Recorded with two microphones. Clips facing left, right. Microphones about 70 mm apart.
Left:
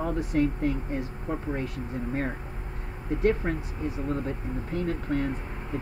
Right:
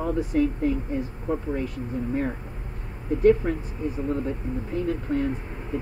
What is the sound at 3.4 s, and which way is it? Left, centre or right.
Speech, left.